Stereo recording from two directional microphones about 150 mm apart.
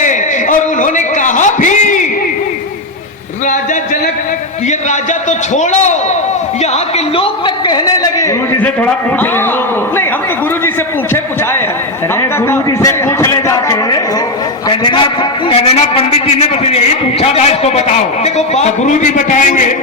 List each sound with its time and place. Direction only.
0.0 s a sound: 55° left (ahead or behind)
5.5 s a man's voice: 50° left (ahead or behind); by 8.3 s 25° left (ahead or behind)
12.5 s a man's voice: 15° left (ahead or behind)
14.8 s a man's voice: 35° left (ahead or behind); by 19.7 s 60° left (ahead or behind)